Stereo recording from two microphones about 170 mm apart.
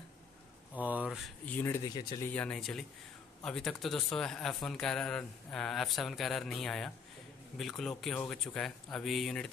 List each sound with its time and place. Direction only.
0.7 s speech: 10° right (ahead or behind); by 1.8 s 10° left (ahead or behind)
2.0 s speech: 25° left (ahead or behind)
2.2 s a man's voice: 10° left (ahead or behind)